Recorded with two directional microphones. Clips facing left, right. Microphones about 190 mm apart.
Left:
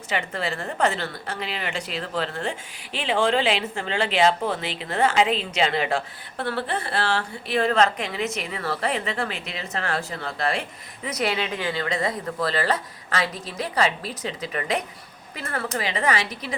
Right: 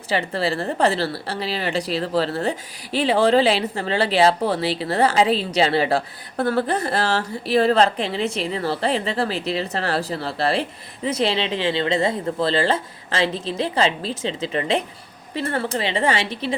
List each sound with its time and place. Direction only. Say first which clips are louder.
0.1 s speech: right 5 dB; 35° right (ahead or behind)